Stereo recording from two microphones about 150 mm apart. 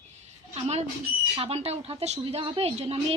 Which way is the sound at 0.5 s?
45° right (ahead or behind).